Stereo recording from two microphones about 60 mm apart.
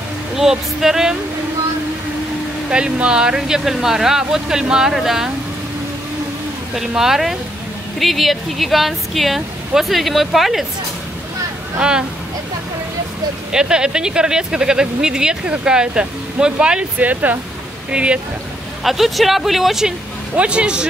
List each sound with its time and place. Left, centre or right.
0.4 s speech: centre
2.7 s speech: centre
7.0 s speech: centre
13.5 s speech: centre
18.9 s speech: centre
20.3 s speech: centre